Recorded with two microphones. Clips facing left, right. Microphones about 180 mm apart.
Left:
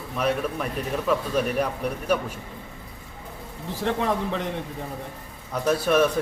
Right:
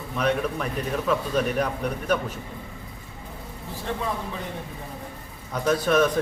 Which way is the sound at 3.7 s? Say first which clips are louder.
Left 5 dB; 80° left.